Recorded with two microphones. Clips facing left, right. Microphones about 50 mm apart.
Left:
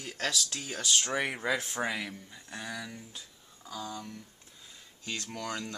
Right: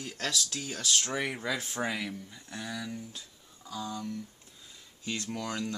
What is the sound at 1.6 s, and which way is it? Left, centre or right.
Speech, centre.